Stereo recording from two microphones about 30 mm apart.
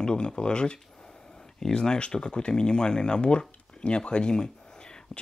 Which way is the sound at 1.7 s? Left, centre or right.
Left.